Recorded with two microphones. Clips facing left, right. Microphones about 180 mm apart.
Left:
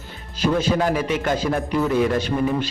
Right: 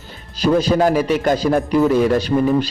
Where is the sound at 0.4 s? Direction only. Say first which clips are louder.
Right 5 dB; 40° right (ahead or behind).